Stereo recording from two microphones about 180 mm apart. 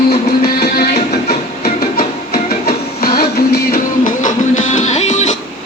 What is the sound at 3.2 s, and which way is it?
Music, 60° left (ahead or behind).